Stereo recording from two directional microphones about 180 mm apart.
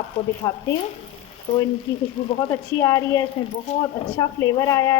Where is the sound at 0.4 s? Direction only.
20° left (ahead or behind).